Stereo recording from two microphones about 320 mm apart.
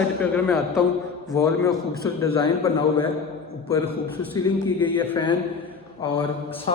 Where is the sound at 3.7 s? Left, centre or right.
Centre.